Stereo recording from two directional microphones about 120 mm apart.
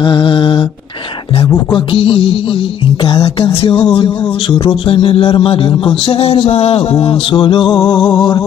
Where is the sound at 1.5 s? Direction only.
40° left (ahead or behind).